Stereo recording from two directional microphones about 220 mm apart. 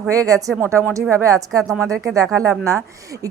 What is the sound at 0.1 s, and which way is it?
Speech, 15° right (ahead or behind).